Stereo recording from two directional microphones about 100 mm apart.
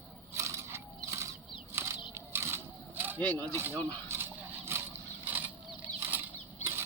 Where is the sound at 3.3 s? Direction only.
15° left (ahead or behind).